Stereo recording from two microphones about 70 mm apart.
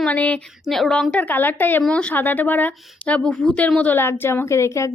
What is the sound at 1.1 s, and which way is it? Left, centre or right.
Speech, left.